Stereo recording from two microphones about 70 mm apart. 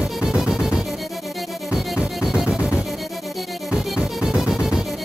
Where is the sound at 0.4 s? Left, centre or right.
Centre.